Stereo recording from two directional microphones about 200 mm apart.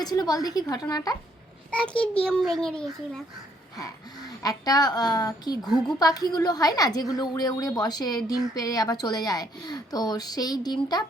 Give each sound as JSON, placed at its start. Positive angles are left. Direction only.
{"t": 0.0, "sound": "a woman's voice", "side_deg": 20}
{"t": 1.7, "sound": "a child's voice", "side_deg": 5}
{"t": 4.4, "sound": "a woman's voice", "side_deg": 20}